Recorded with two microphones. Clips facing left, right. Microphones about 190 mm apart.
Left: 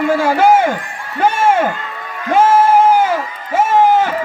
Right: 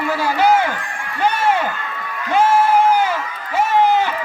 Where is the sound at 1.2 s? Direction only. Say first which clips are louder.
Left 4 dB; 50° left (ahead or behind).